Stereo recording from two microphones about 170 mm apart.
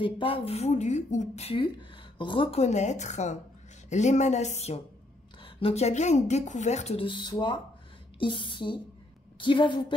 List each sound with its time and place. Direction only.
0.0 s speech: 35° left (ahead or behind)